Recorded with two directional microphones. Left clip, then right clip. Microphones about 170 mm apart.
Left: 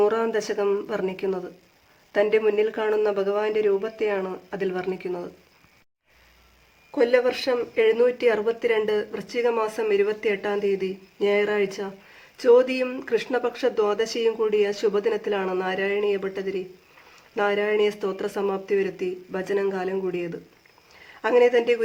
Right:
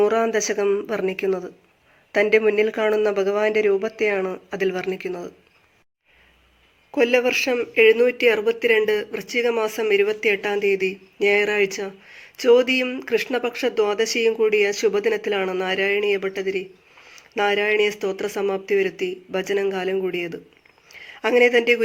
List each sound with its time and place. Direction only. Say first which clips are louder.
0.0 s speech: right 3 dB; 15° right (ahead or behind)
6.9 s speech: right 2 dB; 20° right (ahead or behind)